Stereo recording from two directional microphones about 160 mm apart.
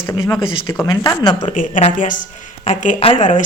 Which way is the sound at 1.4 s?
50° left (ahead or behind).